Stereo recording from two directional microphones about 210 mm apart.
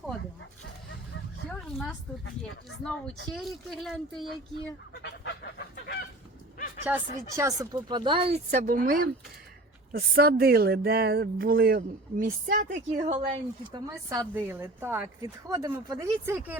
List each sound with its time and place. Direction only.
1.5 s a sound: 5° left (ahead or behind)
2.6 s speech: 5° left (ahead or behind)
5.0 s goose: 55° left (ahead or behind)
6.9 s a woman's voice: 10° right (ahead or behind); by 13.2 s 30° right (ahead or behind)
13.7 s a woman's voice: 15° right (ahead or behind)